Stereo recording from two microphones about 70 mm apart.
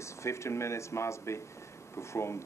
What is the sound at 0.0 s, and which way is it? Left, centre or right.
Speech, left.